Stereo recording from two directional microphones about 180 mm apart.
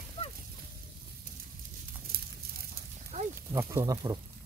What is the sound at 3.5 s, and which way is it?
Speech, 15° right (ahead or behind).